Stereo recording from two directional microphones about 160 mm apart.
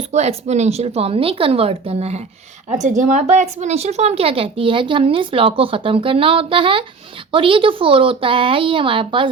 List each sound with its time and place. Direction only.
0.1 s speech: 45° right (ahead or behind)